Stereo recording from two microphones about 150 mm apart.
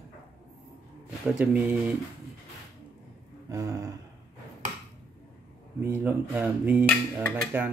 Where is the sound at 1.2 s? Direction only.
5° right (ahead or behind).